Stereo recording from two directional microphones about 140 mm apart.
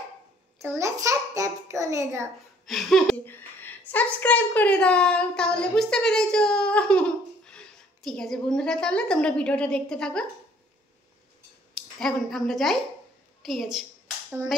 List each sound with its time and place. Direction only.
0.6 s a child's voice: 20° right (ahead or behind)
2.6 s speech: centre (ahead or behind)
3.3 s a woman's voice: 15° left (ahead or behind)
11.7 s a woman's voice: centre (ahead or behind)